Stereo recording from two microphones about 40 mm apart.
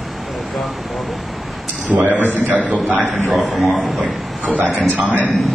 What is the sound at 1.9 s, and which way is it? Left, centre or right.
A man's voice, right.